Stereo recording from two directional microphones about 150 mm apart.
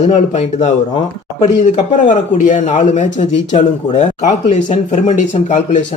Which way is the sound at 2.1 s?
55° left (ahead or behind).